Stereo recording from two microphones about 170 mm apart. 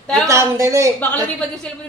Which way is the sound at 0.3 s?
15° right (ahead or behind).